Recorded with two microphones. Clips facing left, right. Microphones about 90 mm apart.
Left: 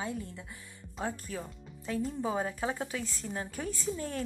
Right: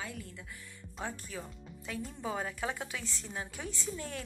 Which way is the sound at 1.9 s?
35° left (ahead or behind).